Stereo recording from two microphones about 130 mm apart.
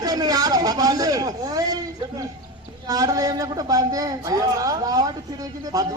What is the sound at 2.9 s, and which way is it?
A man's voice, 30° right (ahead or behind).